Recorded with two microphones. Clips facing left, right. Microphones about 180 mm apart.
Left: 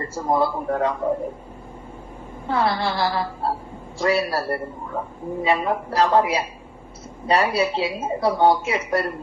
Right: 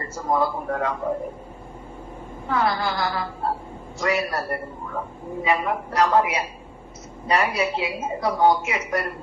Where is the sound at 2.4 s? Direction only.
30° left (ahead or behind).